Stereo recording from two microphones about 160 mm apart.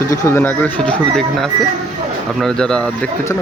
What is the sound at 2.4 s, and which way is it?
Speech, 5° left (ahead or behind).